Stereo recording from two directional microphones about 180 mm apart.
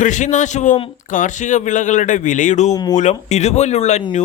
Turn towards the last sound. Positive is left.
turn(degrees=40)  # may be behind; listen again after turning